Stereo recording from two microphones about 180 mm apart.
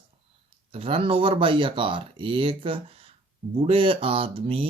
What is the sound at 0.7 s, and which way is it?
Speech, 30° right (ahead or behind).